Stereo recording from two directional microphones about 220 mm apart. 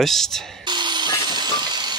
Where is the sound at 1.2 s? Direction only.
20° right (ahead or behind).